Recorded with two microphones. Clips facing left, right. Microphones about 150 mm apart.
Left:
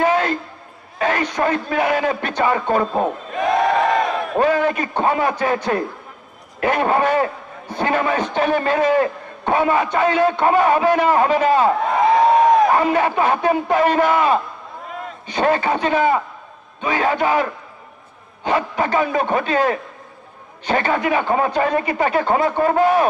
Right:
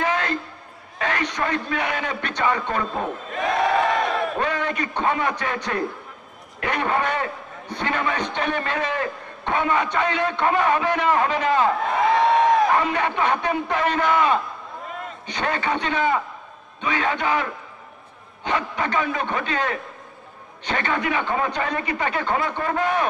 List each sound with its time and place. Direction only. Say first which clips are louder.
0.0 s a sound: left 6 dB; 40° left (ahead or behind)
0.9 s a man's voice: left 5 dB; 40° left (ahead or behind)
3.3 s crowd: left 3 dB; centre (ahead or behind)
4.4 s a man's voice: left 7 dB; 40° left (ahead or behind)
6.6 s a man's voice: left 6 dB; 40° left (ahead or behind)
12.0 s a sound: left 4 dB; centre (ahead or behind)
12.8 s a man's voice: left 5 dB; 40° left (ahead or behind)
14.9 s vehicle: left 4 dB; centre (ahead or behind)
15.3 s a man's voice: left 7 dB; 40° left (ahead or behind)
21.6 s speech: left 7 dB; 30° left (ahead or behind)
21.9 s a man's voice: left 6 dB; 40° left (ahead or behind)